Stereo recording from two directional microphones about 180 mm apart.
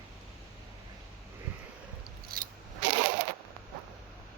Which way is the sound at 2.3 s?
55° right (ahead or behind).